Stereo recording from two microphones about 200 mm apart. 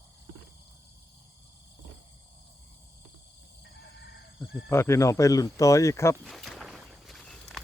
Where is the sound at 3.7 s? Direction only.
60° left (ahead or behind).